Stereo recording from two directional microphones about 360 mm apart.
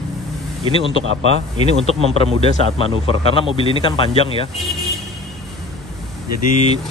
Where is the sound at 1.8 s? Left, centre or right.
Centre.